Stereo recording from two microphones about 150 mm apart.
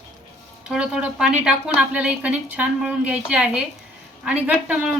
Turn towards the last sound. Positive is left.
turn(degrees=-5)  # may be behind; listen again after turning